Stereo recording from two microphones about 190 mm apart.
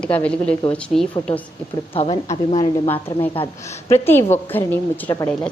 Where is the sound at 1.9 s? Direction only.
30° left (ahead or behind).